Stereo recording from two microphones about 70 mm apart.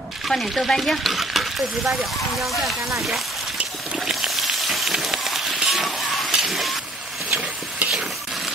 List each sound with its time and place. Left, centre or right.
0.3 s stir: centre
4.0 s a sound: centre
7.2 s stir: centre